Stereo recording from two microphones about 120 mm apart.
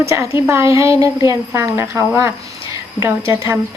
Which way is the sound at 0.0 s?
25° right (ahead or behind).